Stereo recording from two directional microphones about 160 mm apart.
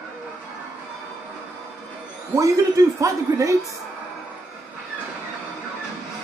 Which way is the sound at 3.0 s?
20° right (ahead or behind).